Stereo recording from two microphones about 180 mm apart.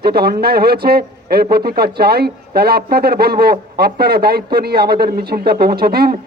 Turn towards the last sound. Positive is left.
turn(degrees=-60)  # may be behind; listen again after turning